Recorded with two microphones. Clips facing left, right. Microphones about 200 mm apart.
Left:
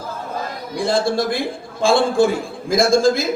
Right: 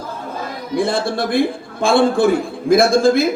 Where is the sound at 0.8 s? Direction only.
60° right (ahead or behind).